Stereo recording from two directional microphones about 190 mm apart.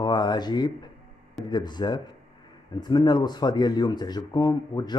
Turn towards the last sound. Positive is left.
turn(degrees=20)  # may be behind; listen again after turning